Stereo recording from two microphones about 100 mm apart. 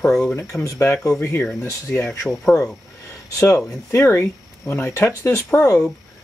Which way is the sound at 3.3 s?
25° left (ahead or behind).